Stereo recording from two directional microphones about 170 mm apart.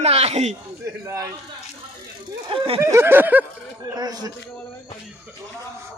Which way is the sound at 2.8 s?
15° right (ahead or behind).